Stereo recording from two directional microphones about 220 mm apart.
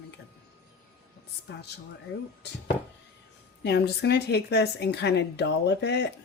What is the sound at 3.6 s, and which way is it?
A woman's voice, 50° left (ahead or behind).